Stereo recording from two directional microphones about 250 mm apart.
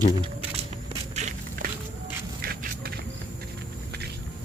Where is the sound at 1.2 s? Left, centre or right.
Right.